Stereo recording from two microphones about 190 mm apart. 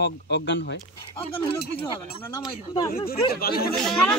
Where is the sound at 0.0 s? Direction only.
65° left (ahead or behind).